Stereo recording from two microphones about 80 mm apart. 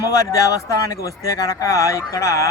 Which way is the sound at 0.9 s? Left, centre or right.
Left.